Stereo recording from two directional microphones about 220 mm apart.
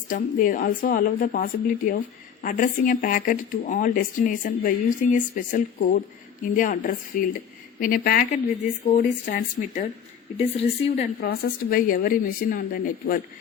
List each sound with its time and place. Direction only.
0.1 s a woman's voice: 35° left (ahead or behind)
11.2 s speech: 45° left (ahead or behind)